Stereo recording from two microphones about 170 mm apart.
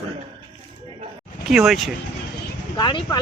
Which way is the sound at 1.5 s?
Centre (ahead or behind).